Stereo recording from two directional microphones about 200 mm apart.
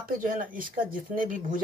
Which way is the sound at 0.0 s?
45° right (ahead or behind).